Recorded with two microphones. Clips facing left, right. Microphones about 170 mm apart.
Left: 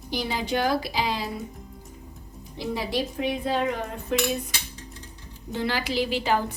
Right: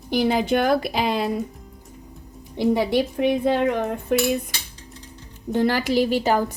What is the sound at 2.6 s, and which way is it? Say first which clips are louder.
Cutlery: right 8 dB; 60° right (ahead or behind).